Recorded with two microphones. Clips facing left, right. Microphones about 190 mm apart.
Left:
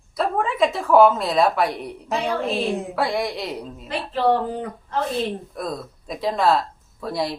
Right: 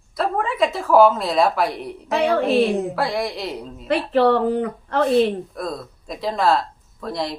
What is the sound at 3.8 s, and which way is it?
A woman's voice, 70° right (ahead or behind).